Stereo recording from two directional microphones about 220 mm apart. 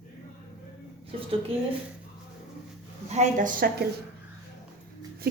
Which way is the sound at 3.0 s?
30° right (ahead or behind).